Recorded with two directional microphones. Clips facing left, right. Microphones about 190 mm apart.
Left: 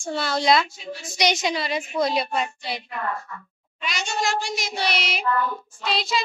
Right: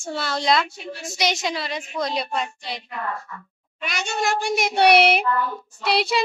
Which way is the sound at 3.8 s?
55° right (ahead or behind).